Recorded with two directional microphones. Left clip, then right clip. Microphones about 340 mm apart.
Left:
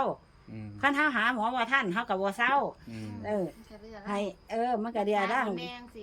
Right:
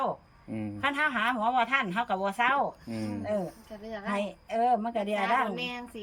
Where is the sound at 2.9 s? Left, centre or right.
Right.